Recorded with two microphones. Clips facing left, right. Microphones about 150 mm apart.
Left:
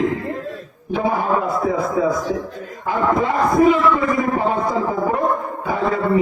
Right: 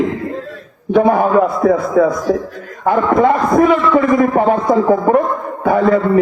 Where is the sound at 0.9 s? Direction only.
60° right (ahead or behind).